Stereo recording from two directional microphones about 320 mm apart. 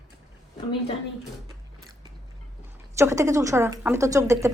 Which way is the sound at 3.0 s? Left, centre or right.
Centre.